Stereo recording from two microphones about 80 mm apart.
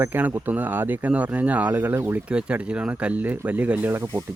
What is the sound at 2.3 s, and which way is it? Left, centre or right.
Speech, centre.